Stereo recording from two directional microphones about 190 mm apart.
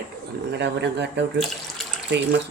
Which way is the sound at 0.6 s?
65° right (ahead or behind).